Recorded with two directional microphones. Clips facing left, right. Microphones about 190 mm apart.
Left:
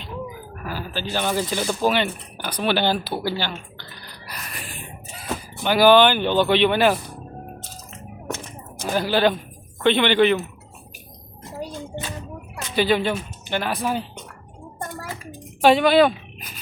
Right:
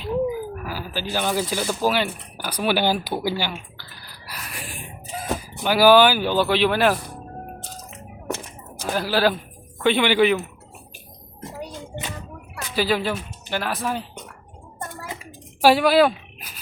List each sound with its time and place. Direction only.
0.6 s speech: 10° right (ahead or behind)
8.8 s speech: centre (ahead or behind)
12.7 s speech: 5° right (ahead or behind)
15.0 s hands: 20° right (ahead or behind)
15.6 s a sound: 5° right (ahead or behind)